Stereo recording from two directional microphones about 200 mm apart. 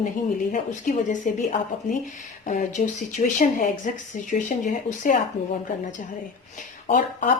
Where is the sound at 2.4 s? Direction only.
35° left (ahead or behind).